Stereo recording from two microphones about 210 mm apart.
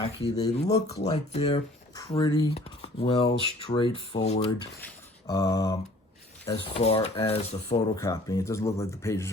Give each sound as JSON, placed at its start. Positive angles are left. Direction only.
{"t": 0.3, "sound": "speech", "side_deg": 20}
{"t": 0.9, "sound": "speech", "side_deg": 30}
{"t": 4.8, "sound": "speech", "side_deg": 15}
{"t": 6.4, "sound": "speech", "side_deg": 30}
{"t": 7.9, "sound": "speech", "side_deg": 15}